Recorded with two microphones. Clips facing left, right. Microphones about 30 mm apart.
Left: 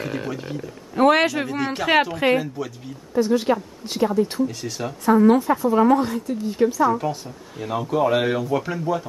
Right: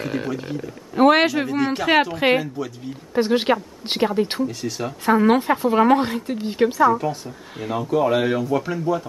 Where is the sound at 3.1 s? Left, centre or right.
Right.